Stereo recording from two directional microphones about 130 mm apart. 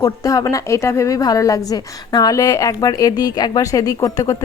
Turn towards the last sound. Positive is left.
turn(degrees=25)  # may be behind; listen again after turning